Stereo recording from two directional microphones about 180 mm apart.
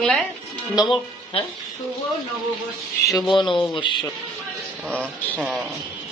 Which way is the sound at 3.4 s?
25° left (ahead or behind).